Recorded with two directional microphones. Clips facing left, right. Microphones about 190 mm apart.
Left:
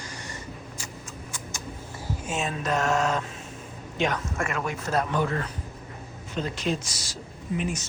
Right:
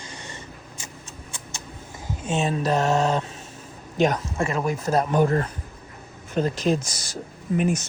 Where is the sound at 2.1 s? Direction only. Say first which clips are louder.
Right 7 dB; 30° right (ahead or behind).